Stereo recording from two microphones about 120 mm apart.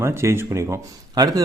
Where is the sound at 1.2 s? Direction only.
35° right (ahead or behind).